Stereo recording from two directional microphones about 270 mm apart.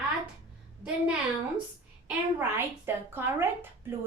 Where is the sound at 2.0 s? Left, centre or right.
Centre.